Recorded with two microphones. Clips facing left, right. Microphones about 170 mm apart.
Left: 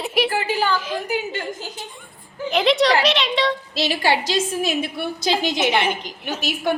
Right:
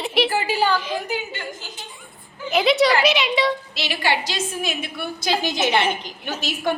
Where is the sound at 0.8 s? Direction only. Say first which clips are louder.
Even; 5° left (ahead or behind).